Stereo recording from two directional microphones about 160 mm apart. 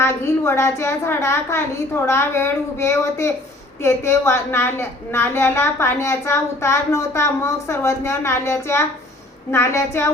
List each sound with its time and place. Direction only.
0.0 s a woman's voice: 15° left (ahead or behind)